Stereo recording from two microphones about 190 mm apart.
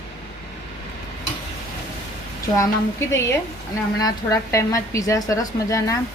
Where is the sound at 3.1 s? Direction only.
15° left (ahead or behind).